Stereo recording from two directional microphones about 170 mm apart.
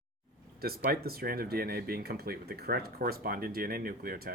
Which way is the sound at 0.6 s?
65° right (ahead or behind).